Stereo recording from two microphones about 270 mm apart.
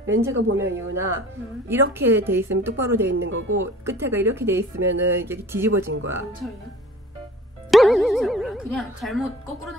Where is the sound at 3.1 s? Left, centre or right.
Right.